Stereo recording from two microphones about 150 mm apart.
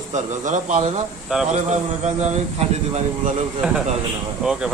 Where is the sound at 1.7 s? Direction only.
50° right (ahead or behind).